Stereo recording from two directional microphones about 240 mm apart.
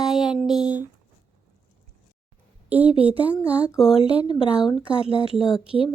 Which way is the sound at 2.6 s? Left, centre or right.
Centre.